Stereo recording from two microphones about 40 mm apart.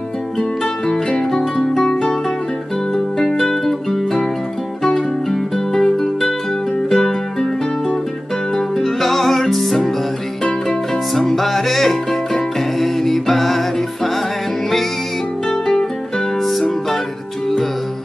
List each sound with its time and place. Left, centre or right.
0.4 s music: centre
8.5 s music: centre
11.1 s music: centre
15.4 s guitar: centre